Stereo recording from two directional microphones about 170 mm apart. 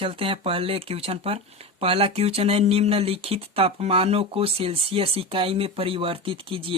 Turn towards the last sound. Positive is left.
turn(degrees=-30)  # may be behind; listen again after turning